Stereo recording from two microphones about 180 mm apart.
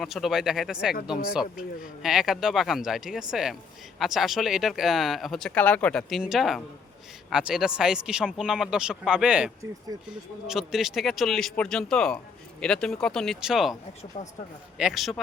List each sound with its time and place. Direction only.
0.0 s speech: centre (ahead or behind)
14.2 s speech: 40° left (ahead or behind)
14.8 s speech: centre (ahead or behind)